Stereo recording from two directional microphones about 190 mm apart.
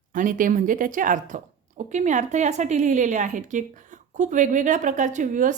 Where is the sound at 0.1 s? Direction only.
45° right (ahead or behind).